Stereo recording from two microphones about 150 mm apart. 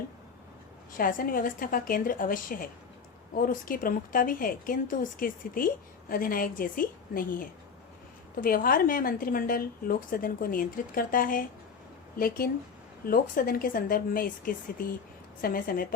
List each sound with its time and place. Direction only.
0.9 s a woman's voice: 70° left (ahead or behind)